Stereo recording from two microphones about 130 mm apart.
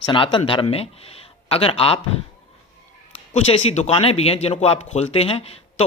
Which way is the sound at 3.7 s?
55° left (ahead or behind).